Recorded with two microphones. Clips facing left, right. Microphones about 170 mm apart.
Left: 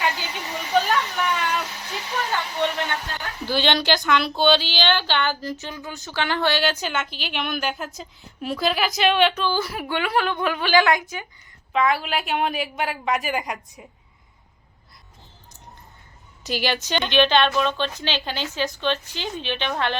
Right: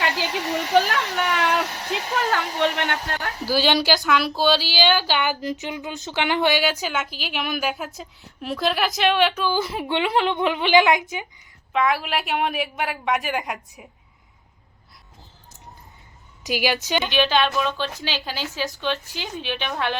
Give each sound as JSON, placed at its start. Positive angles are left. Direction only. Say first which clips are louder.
{"t": 0.0, "sound": "a sound", "louder": "right 2 dB", "side_deg": -80}
{"t": 2.0, "sound": "hair dryer", "louder": "right 2 dB", "side_deg": -35}
{"t": 2.6, "sound": "speech", "louder": "right 2 dB", "side_deg": -70}
{"t": 3.4, "sound": "a woman's voice", "louder": "right 1 dB", "side_deg": -5}
{"t": 6.6, "sound": "a woman's voice", "louder": "even", "side_deg": 0}
{"t": 9.6, "sound": "a woman's voice", "louder": "right 2 dB", "side_deg": -20}
{"t": 11.7, "sound": "a woman's voice", "louder": "even", "side_deg": 0}
{"t": 16.5, "sound": "a woman's voice", "louder": "right 2 dB", "side_deg": -10}